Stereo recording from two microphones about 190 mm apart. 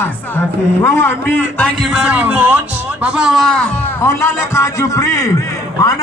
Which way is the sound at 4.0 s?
15° left (ahead or behind).